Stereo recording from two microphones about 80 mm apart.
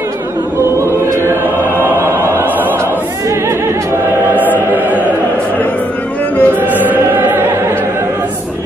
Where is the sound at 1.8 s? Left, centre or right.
Right.